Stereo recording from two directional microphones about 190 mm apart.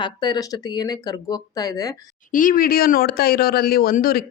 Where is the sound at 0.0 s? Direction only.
20° left (ahead or behind).